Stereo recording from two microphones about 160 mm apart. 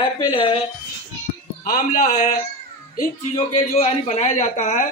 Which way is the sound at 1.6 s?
60° left (ahead or behind).